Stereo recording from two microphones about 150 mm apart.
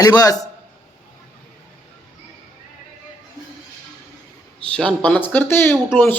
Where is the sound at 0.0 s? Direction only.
25° left (ahead or behind).